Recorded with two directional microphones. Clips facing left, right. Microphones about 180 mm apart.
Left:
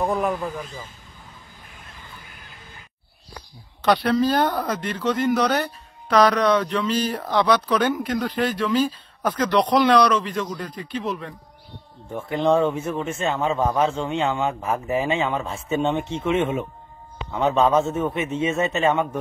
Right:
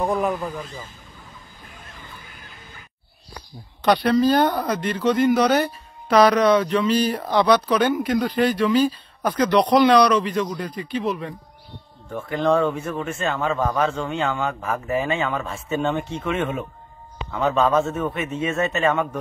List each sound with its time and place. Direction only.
0.0 s speech: centre (ahead or behind)
3.8 s speech: 5° left (ahead or behind)
12.1 s a man's voice: 20° left (ahead or behind)
17.7 s speech: centre (ahead or behind)
18.0 s a man's voice: 20° left (ahead or behind)
18.4 s speech: centre (ahead or behind)